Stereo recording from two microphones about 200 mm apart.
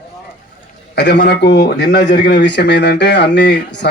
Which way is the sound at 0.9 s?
60° left (ahead or behind).